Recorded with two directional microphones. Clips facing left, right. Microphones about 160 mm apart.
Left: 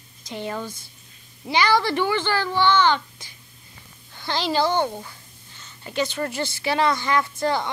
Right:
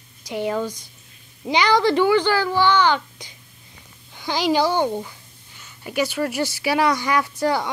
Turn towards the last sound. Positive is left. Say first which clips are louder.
# right 2 dB
turn(degrees=-10)  # may be behind; listen again after turning